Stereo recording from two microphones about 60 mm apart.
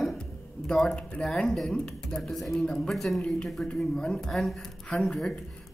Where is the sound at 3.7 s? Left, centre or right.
Centre.